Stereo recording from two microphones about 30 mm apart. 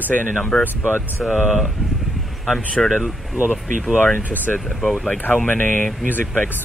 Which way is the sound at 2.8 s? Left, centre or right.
Left.